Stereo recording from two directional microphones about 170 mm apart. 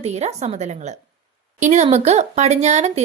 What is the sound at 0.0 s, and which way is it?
A woman's voice, 40° right (ahead or behind).